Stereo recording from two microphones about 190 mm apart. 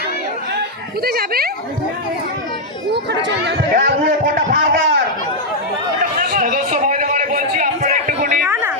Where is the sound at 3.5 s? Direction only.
50° right (ahead or behind).